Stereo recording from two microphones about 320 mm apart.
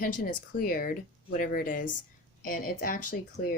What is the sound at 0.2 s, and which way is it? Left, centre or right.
Speech, left.